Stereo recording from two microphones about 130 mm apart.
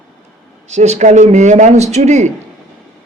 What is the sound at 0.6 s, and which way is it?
A man's voice, 60° right (ahead or behind).